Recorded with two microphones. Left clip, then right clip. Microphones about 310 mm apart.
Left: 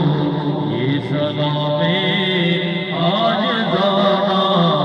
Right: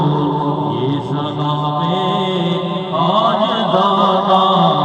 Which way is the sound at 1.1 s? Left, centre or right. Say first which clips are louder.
Even; centre.